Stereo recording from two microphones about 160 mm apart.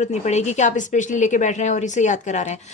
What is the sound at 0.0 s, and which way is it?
A woman's voice, 45° left (ahead or behind).